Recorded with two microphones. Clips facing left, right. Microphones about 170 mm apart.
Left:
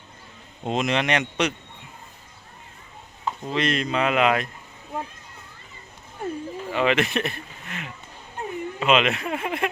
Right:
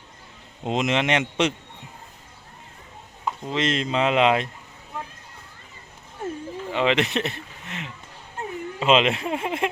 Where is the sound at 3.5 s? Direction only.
20° right (ahead or behind).